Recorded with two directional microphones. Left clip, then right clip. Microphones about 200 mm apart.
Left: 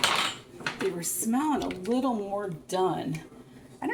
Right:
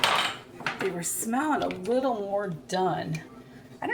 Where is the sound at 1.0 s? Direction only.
25° left (ahead or behind).